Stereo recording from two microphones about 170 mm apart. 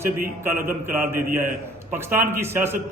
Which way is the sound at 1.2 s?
55° right (ahead or behind).